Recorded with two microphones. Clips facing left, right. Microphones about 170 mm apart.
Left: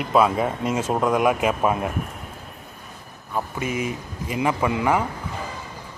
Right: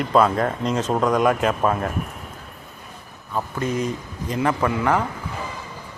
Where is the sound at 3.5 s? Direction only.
10° left (ahead or behind).